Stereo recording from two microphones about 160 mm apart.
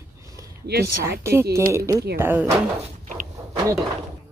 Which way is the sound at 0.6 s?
80° right.